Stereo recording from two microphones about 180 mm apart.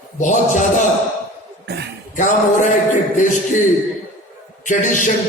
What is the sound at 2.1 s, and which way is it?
Speech, 45° left (ahead or behind).